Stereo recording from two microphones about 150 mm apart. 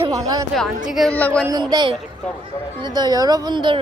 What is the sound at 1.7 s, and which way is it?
Speech, 30° right (ahead or behind).